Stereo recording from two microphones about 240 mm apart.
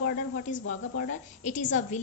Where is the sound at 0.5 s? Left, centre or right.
Left.